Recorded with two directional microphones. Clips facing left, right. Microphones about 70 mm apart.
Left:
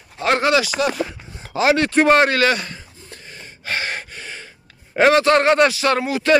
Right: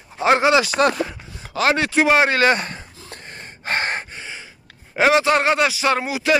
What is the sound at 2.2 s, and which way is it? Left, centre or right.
Speech, right.